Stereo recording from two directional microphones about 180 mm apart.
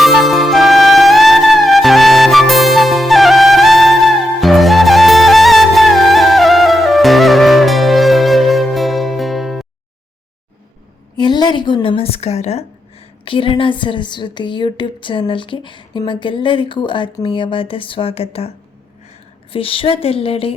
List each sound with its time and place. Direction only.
0.0 s music: centre (ahead or behind)
11.2 s a woman's voice: 25° left (ahead or behind)